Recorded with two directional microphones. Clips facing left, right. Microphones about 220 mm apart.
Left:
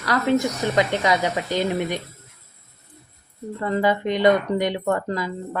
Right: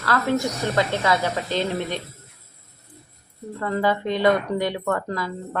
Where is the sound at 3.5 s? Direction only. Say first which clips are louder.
Left 1 dB; 20° left (ahead or behind).